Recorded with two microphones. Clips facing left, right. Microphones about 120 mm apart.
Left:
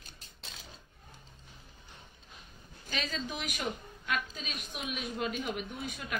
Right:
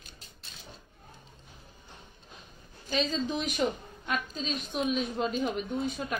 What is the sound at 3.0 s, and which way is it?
A woman's voice, 25° right (ahead or behind).